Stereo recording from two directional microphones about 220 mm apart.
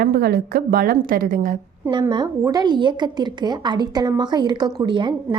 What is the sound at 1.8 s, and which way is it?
A woman's voice, 20° right (ahead or behind).